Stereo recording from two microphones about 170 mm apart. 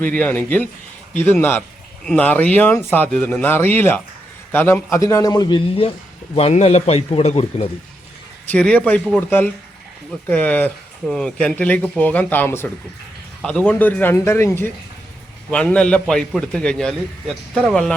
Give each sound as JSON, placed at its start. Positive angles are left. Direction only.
{"t": 0.0, "sound": "a man's voice", "side_deg": 10}
{"t": 8.4, "sound": "a man's voice", "side_deg": 5}